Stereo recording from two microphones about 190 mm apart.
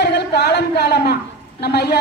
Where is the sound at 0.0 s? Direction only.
60° left (ahead or behind).